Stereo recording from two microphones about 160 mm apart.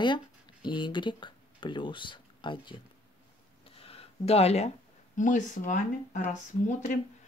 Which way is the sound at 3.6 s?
35° left (ahead or behind).